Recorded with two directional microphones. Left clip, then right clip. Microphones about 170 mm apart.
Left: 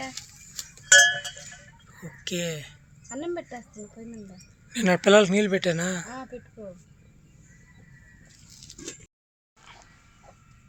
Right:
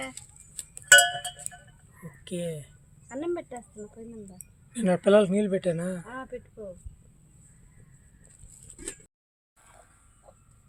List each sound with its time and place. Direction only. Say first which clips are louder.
0.1 s music: left 7 dB; 25° left (ahead or behind)
0.9 s cowbell: left 1 dB; 70° right (ahead or behind)
2.2 s speech: left 4 dB; 5° right (ahead or behind)
4.7 s speech: left 3 dB; 5° left (ahead or behind)